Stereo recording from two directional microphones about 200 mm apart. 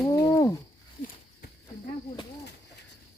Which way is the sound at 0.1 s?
15° left (ahead or behind).